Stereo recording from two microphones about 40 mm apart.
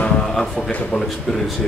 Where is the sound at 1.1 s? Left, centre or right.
Centre.